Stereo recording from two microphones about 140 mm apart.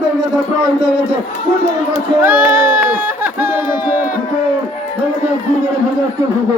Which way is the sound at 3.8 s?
10° right (ahead or behind).